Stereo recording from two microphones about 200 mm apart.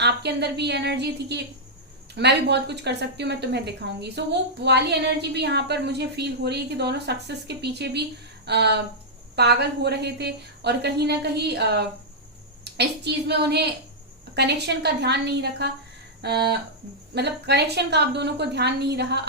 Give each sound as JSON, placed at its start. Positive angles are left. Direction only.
{"t": 0.0, "sound": "a woman's voice", "side_deg": -55}